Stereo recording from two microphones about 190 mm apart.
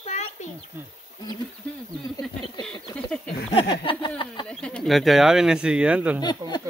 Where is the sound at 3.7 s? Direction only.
25° left (ahead or behind).